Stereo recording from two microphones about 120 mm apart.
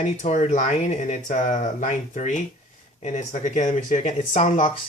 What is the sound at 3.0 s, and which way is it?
Speech, 75° left (ahead or behind).